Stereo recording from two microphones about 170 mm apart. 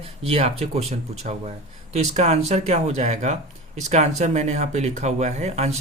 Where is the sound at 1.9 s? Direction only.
40° right (ahead or behind).